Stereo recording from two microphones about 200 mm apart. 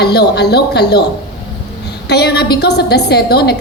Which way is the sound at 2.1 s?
55° left (ahead or behind).